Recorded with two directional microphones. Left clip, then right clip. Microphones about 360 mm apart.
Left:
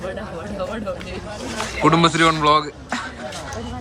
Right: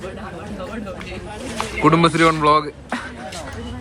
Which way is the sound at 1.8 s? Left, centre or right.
Centre.